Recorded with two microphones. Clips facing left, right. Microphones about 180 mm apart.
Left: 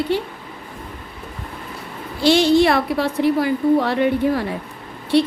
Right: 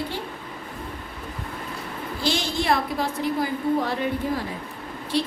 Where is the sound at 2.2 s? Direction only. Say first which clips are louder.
Left 13 dB; 70° left (ahead or behind).